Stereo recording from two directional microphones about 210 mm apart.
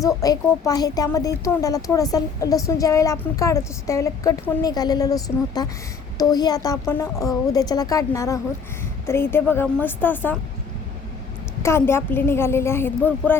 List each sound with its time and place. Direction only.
0.0 s speech: 15° left (ahead or behind)
11.6 s speech: 10° left (ahead or behind)